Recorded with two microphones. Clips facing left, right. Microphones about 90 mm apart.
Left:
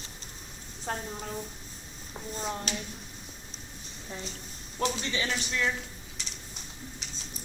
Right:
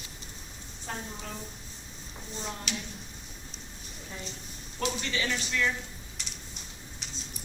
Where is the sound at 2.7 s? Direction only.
40° left (ahead or behind).